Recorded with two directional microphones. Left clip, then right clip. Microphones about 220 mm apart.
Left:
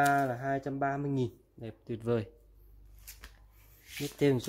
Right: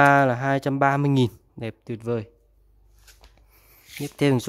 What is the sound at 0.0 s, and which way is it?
Speech, 45° right (ahead or behind).